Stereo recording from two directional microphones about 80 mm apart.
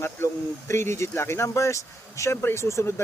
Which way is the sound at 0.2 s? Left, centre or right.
Left.